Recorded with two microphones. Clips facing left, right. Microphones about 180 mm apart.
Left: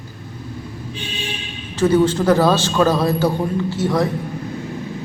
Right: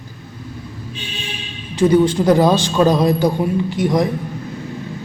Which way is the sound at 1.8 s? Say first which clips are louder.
Right 2 dB; 15° right (ahead or behind).